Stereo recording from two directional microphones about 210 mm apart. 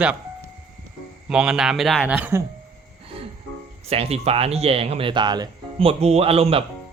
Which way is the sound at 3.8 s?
30° right (ahead or behind).